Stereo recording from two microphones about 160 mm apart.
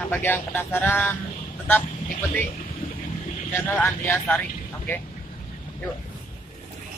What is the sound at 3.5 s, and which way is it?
Speech, 15° left (ahead or behind).